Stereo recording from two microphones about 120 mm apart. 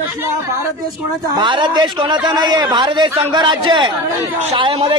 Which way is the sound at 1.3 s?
40° right (ahead or behind).